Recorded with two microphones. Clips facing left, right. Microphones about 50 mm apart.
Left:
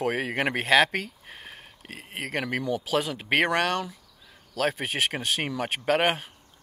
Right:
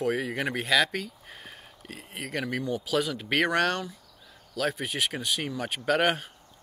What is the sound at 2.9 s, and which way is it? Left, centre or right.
Speech, left.